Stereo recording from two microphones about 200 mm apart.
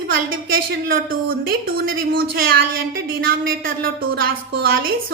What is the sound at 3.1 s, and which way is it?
A woman's voice, 45° right (ahead or behind).